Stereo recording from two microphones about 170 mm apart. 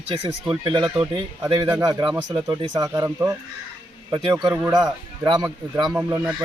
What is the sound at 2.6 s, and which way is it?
Speech, 20° right (ahead or behind).